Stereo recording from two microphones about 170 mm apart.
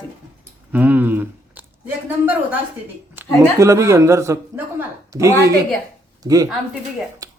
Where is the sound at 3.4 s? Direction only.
15° right (ahead or behind).